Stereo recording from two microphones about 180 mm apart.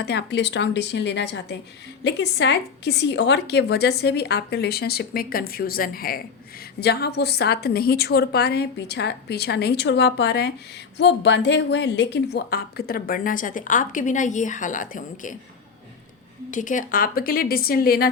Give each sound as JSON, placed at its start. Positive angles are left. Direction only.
{"t": 0.0, "sound": "a woman's voice", "side_deg": 65}
{"t": 16.5, "sound": "a woman's voice", "side_deg": 45}